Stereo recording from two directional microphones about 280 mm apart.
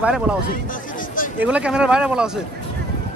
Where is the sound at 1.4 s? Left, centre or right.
Centre.